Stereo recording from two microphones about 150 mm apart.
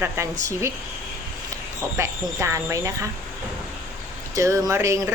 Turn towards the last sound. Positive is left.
turn(degrees=-20)  # may be behind; listen again after turning